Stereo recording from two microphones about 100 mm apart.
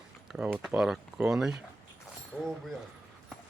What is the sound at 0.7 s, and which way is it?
Speech, 5° right (ahead or behind).